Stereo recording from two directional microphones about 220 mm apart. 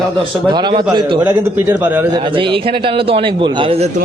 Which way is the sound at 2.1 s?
20° right (ahead or behind).